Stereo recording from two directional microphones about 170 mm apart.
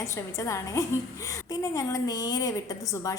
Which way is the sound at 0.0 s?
15° left (ahead or behind).